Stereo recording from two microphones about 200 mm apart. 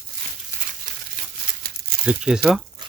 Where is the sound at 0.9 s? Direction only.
40° right (ahead or behind).